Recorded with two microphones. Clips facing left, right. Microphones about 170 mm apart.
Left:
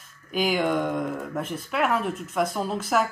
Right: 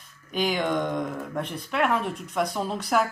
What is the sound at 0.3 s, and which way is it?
Speech, 5° left (ahead or behind).